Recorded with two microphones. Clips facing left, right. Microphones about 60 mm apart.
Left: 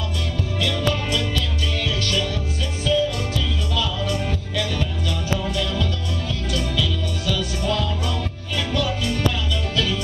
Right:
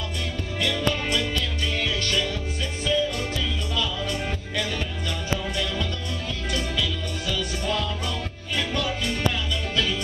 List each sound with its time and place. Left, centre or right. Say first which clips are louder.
0.6 s music: left 1 dB; centre
4.0 s music: left 4 dB; centre